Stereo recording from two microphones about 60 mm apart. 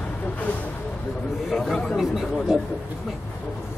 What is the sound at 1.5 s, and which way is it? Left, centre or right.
Speech, centre.